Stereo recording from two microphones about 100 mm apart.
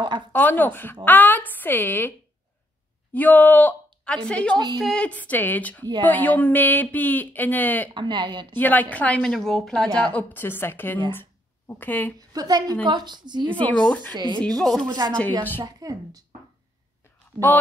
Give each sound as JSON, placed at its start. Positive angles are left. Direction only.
{"t": 0.3, "sound": "a woman's voice", "side_deg": 20}
{"t": 7.9, "sound": "speech", "side_deg": -50}
{"t": 8.5, "sound": "speech", "side_deg": 15}
{"t": 9.2, "sound": "speech", "side_deg": 0}
{"t": 10.0, "sound": "a woman's voice", "side_deg": 15}
{"t": 12.2, "sound": "a woman's voice", "side_deg": -40}
{"t": 13.5, "sound": "speech", "side_deg": 15}
{"t": 14.1, "sound": "speech", "side_deg": -45}
{"t": 14.6, "sound": "speech", "side_deg": 0}
{"t": 14.9, "sound": "a woman's voice", "side_deg": -45}